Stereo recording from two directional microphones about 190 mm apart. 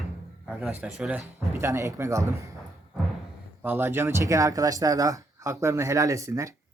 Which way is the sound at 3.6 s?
10° right (ahead or behind).